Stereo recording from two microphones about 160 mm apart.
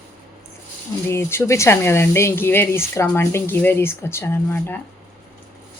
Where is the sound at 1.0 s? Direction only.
15° left (ahead or behind).